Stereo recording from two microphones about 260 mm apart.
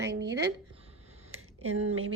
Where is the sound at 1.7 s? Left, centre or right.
Right.